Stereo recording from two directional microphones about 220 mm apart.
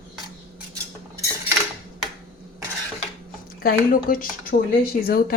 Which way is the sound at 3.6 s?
40° left (ahead or behind).